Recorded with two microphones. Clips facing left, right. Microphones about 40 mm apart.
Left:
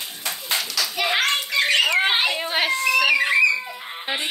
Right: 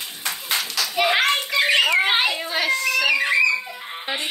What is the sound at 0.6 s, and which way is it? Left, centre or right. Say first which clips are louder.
Children playing: right 5 dB; right.